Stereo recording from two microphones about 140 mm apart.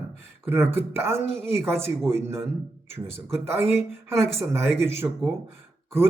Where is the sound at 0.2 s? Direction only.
15° right (ahead or behind).